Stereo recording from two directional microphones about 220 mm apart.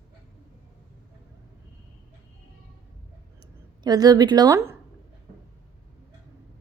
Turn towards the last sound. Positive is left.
turn(degrees=-15)  # may be behind; listen again after turning